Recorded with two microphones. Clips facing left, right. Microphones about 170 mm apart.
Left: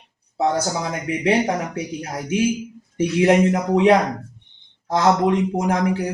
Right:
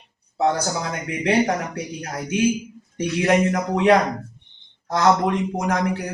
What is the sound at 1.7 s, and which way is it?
A man's voice, 25° left (ahead or behind).